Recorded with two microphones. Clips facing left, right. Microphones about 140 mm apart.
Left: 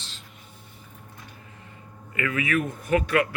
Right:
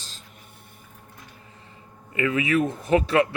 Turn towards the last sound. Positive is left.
turn(degrees=-30)  # may be behind; listen again after turning